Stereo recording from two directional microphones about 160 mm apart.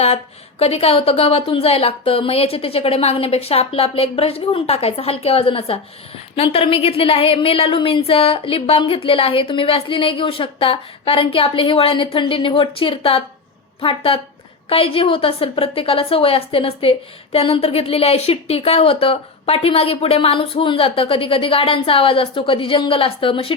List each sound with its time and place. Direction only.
0.6 s a woman's voice: 40° left (ahead or behind)